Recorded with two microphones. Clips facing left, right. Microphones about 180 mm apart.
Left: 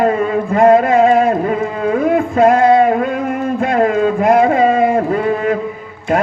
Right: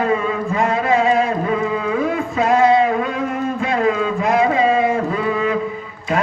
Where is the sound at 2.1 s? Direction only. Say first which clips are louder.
Left 6 dB; 55° left (ahead or behind).